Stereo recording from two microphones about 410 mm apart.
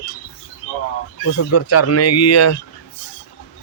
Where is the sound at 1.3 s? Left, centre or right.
Left.